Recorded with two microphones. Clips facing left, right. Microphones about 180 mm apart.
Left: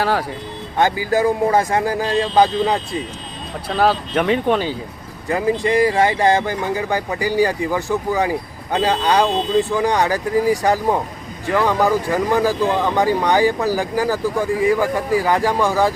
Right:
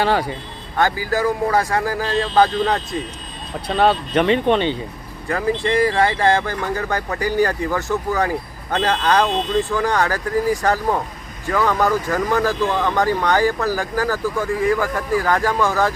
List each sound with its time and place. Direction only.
0.0 s speech: centre (ahead or behind)
0.8 s speech: 20° left (ahead or behind)
3.7 s speech: centre (ahead or behind)
5.3 s speech: 15° left (ahead or behind)